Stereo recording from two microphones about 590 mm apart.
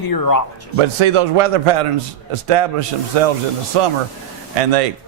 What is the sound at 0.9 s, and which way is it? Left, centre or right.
A man's voice, right.